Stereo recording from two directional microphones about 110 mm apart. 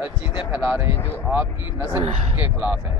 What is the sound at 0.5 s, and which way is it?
Speech, 15° right (ahead or behind).